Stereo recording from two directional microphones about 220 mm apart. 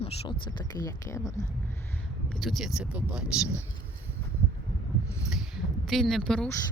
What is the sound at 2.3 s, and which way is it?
Speech, centre (ahead or behind).